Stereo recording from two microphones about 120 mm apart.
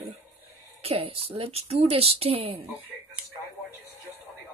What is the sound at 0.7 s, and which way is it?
Speech, 55° right (ahead or behind).